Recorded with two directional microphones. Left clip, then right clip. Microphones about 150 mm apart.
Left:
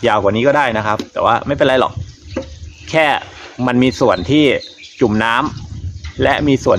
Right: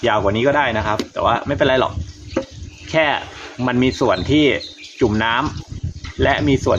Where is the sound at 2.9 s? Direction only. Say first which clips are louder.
Left 3 dB; 90° left.